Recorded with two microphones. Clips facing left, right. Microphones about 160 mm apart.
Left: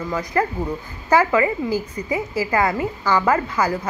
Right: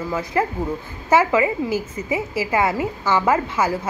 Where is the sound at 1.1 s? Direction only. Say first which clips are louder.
Even; 20° right (ahead or behind).